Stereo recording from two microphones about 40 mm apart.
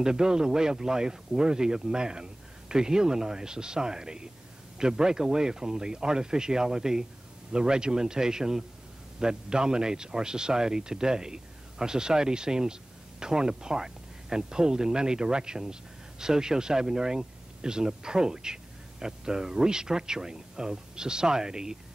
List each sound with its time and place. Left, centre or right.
0.0 s speech: centre